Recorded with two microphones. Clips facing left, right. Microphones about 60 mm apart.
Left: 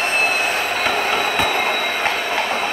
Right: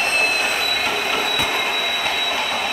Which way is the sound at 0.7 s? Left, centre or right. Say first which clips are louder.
Left 3 dB; left.